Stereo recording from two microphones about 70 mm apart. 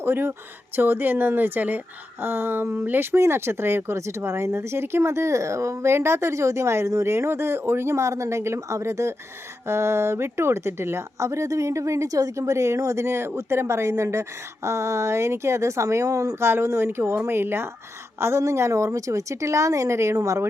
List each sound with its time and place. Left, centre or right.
0.0 s speech: right
16.4 s speech: right